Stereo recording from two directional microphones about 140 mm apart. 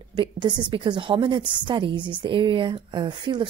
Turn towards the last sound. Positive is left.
turn(degrees=-35)  # may be behind; listen again after turning